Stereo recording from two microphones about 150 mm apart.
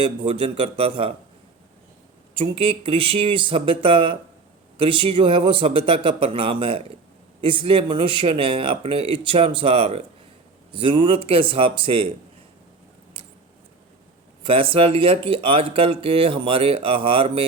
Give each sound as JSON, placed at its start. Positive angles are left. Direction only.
{"t": 0.0, "sound": "speech", "side_deg": -35}
{"t": 2.3, "sound": "speech", "side_deg": -35}
{"t": 14.4, "sound": "speech", "side_deg": -35}